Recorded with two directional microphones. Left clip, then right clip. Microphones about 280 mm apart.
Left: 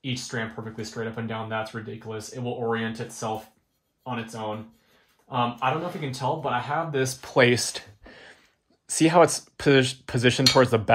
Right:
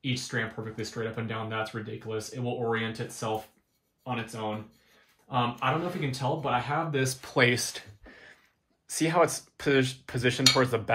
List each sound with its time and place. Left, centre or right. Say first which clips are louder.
0.0 s speech: left 1 dB; centre